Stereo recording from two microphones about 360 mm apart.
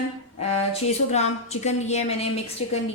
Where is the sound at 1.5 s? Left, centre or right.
Centre.